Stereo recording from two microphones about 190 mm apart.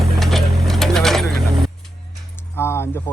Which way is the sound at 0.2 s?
Centre (ahead or behind).